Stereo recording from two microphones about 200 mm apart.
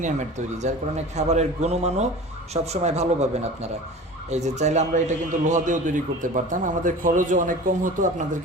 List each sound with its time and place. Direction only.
0.0 s a man's voice: 35° right (ahead or behind)